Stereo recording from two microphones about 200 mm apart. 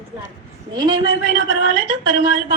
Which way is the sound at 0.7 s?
20° right (ahead or behind).